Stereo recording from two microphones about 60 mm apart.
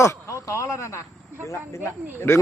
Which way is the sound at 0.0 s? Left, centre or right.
Left.